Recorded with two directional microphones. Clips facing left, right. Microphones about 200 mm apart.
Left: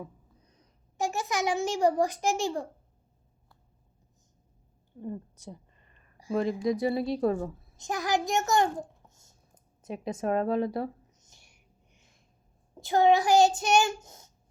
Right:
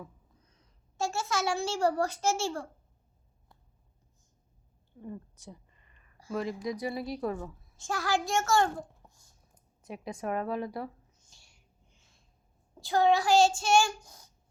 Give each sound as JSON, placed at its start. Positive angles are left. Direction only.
{"t": 0.9, "sound": "a child's voice", "side_deg": 15}
{"t": 4.9, "sound": "a woman's voice", "side_deg": 30}
{"t": 6.3, "sound": "child singing", "side_deg": 25}
{"t": 7.8, "sound": "a child's voice", "side_deg": 20}
{"t": 9.8, "sound": "a sound", "side_deg": 25}
{"t": 12.7, "sound": "child singing", "side_deg": 20}